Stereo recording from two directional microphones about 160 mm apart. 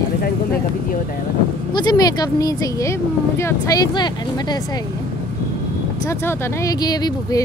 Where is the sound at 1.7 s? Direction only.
25° left (ahead or behind).